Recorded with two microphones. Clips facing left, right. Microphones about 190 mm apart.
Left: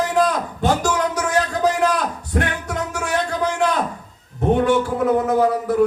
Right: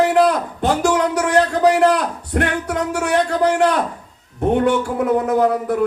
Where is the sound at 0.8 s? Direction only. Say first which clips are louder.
Right 4 dB; 65° right (ahead or behind).